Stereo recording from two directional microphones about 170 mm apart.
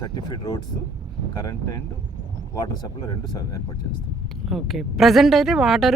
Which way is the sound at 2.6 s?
25° left (ahead or behind).